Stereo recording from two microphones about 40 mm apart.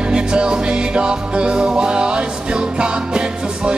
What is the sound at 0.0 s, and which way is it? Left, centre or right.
Music, right.